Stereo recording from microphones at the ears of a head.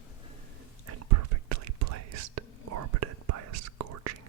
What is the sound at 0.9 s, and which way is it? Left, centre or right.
Whispering, right.